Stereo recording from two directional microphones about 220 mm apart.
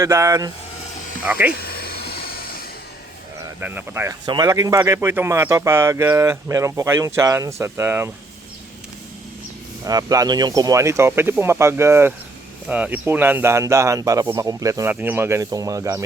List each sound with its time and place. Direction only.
0.0 s speech: 15° right (ahead or behind)
1.5 s a sound: 45° left (ahead or behind)
3.6 s speech: 10° right (ahead or behind)
9.8 s speech: 15° right (ahead or behind)